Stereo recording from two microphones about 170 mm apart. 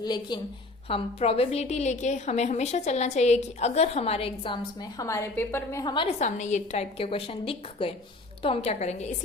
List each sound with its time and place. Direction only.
0.0 s a woman's voice: 25° left (ahead or behind)
5.8 s a woman's voice: 30° left (ahead or behind)